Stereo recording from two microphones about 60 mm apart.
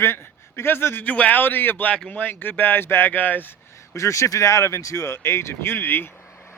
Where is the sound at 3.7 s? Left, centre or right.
Left.